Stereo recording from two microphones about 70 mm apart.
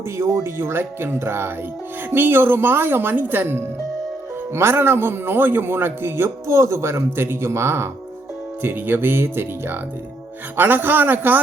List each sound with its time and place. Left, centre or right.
0.2 s a man's voice: right